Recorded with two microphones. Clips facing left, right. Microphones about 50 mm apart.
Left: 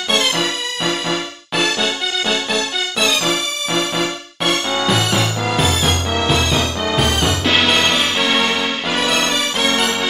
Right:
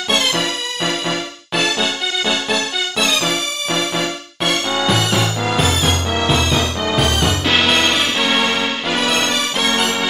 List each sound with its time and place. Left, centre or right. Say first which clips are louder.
1.6 s music: even; centre
4.5 s music: even; centre